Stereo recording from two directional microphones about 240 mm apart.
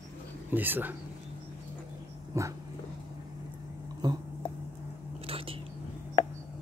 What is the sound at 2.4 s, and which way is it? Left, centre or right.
Speech, centre.